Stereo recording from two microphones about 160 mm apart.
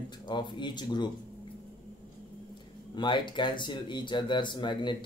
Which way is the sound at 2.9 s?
30° left (ahead or behind).